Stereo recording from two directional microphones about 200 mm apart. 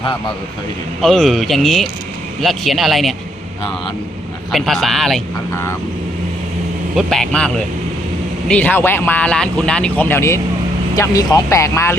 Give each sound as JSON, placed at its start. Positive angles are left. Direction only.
{"t": 1.0, "sound": "speech", "side_deg": 0}
{"t": 4.5, "sound": "speech", "side_deg": 0}
{"t": 5.5, "sound": "speech", "side_deg": 15}
{"t": 6.9, "sound": "speech", "side_deg": 5}